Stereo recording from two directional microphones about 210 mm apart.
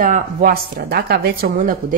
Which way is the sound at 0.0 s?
40° right (ahead or behind).